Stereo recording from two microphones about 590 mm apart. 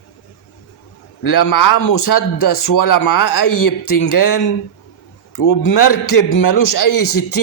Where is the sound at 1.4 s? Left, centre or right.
Left.